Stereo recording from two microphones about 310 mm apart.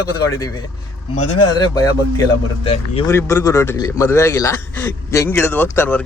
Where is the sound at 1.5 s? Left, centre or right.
Centre.